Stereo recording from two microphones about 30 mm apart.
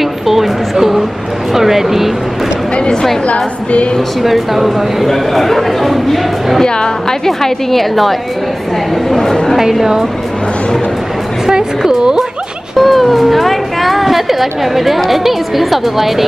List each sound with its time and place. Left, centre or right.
0.0 s a sound: centre
4.2 s speech: centre
6.6 s a woman's voice: left
7.2 s a woman's voice: centre
9.6 s a woman's voice: centre
12.0 s music: right
12.7 s music: centre